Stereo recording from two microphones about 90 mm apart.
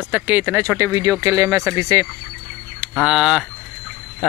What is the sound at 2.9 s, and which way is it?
Speech, 5° right (ahead or behind).